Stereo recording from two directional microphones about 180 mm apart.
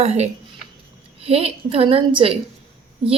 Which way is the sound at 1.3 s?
35° right (ahead or behind).